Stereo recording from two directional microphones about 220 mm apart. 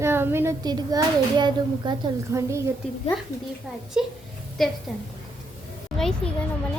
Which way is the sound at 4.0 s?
5° right (ahead or behind).